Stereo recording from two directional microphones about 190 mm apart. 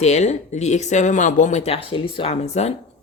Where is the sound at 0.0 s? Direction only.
35° left (ahead or behind).